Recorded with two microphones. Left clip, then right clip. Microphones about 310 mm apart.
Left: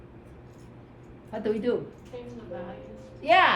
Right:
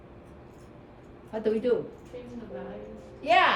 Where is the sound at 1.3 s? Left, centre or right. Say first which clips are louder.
Right 2 dB; left.